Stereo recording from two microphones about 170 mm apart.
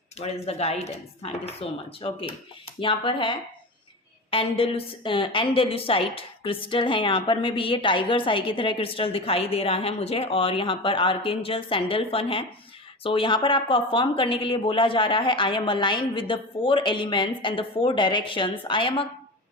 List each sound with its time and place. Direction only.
0.2 s a woman's voice: 35° left (ahead or behind)